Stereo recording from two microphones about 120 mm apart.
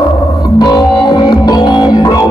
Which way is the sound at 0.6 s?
35° left (ahead or behind).